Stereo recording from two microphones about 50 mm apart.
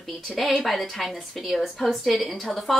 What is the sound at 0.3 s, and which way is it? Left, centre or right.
Speech, centre.